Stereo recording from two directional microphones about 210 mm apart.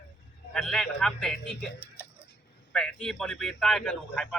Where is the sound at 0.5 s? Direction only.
5° left (ahead or behind).